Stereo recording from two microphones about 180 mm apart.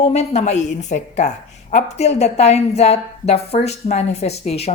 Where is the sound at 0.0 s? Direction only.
35° left (ahead or behind).